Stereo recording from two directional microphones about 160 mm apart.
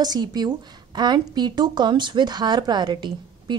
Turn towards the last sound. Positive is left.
turn(degrees=-30)  # may be behind; listen again after turning